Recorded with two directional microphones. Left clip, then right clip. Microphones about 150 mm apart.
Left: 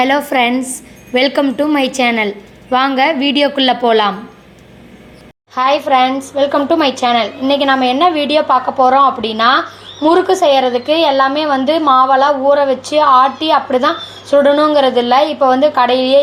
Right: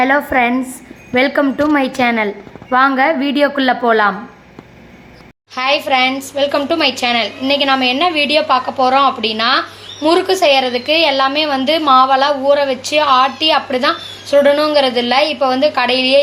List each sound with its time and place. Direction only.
0.0 s a woman's voice: 15° left (ahead or behind)
5.5 s a woman's voice: 10° left (ahead or behind)